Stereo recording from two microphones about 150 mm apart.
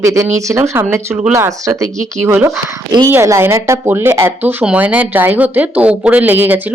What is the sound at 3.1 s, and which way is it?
Speech, 20° right (ahead or behind).